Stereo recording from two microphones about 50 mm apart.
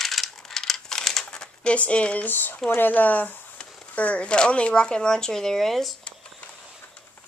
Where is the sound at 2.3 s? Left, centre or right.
Left; by 5.9 s centre.